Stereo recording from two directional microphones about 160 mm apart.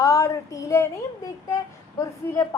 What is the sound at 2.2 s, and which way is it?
Speech, 15° left (ahead or behind).